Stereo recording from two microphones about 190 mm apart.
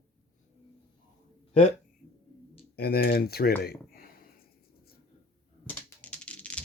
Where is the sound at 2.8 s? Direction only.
55° left (ahead or behind).